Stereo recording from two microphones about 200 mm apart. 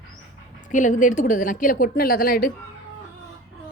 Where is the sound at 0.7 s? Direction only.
40° left (ahead or behind).